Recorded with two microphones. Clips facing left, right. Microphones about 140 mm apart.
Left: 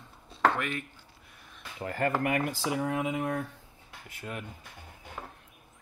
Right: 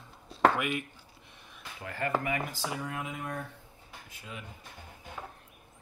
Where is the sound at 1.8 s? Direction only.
45° left (ahead or behind).